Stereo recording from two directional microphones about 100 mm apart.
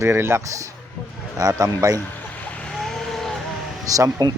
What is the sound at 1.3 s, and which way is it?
Speech, 35° right (ahead or behind).